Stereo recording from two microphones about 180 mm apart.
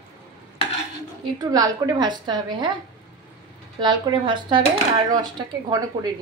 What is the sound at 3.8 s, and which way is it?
A woman's voice, 25° right (ahead or behind).